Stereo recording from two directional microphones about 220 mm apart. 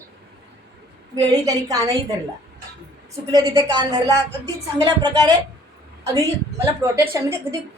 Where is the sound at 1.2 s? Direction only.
15° right (ahead or behind).